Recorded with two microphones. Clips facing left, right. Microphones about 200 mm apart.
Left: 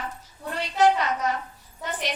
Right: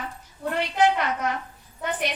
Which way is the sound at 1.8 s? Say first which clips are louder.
Right 3 dB; 55° right (ahead or behind).